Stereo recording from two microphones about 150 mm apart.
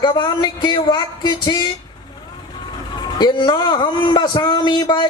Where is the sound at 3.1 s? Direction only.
30° left (ahead or behind).